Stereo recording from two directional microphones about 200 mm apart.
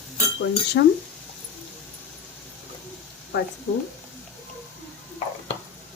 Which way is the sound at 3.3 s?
55° left (ahead or behind).